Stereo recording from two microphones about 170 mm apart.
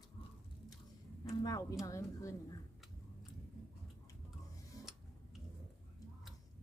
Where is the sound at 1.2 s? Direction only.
20° left (ahead or behind).